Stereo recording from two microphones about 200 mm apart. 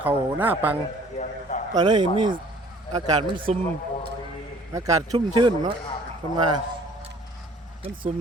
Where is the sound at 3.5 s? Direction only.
35° right (ahead or behind).